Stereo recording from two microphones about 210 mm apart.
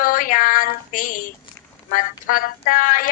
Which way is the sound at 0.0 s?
40° left (ahead or behind).